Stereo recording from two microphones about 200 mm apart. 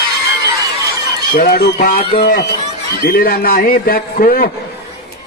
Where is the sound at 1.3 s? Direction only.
50° left (ahead or behind).